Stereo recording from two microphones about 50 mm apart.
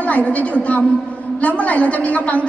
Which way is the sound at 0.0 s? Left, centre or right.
Left.